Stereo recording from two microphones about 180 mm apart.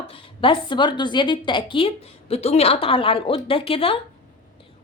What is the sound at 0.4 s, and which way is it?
A woman's voice, 30° left (ahead or behind).